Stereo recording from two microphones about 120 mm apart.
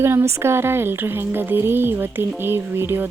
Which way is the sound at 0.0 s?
20° right (ahead or behind).